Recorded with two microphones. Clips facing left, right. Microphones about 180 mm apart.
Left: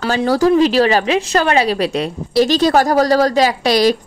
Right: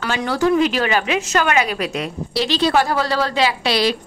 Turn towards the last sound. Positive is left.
turn(degrees=45)  # may be behind; listen again after turning